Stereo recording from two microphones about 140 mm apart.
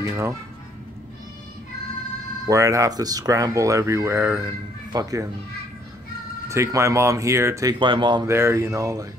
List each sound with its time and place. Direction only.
0.1 s speech: 20° right (ahead or behind)
2.4 s speech: 20° right (ahead or behind)
6.5 s speech: 20° right (ahead or behind)
7.8 s speech: 35° right (ahead or behind)
8.3 s speech: 20° right (ahead or behind)